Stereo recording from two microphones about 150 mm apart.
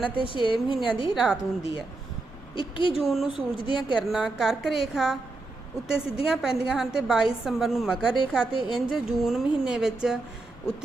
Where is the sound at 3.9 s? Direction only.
5° right (ahead or behind).